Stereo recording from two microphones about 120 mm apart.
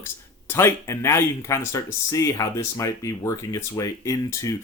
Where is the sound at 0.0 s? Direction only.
20° left (ahead or behind).